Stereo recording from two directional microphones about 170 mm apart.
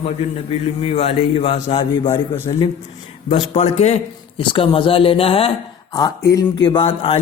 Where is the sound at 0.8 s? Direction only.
35° left (ahead or behind).